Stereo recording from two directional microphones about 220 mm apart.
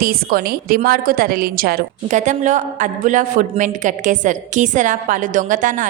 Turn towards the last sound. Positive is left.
turn(degrees=-35)  # may be behind; listen again after turning